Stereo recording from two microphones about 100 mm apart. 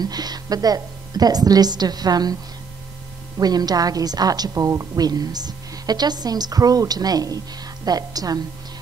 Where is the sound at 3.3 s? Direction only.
40° right (ahead or behind).